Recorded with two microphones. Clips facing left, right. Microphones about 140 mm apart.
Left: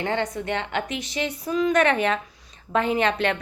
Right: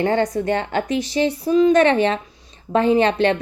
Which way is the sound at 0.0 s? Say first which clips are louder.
Right 7 dB; 40° right (ahead or behind).